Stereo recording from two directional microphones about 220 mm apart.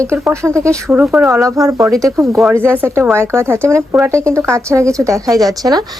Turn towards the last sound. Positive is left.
turn(degrees=-15)  # may be behind; listen again after turning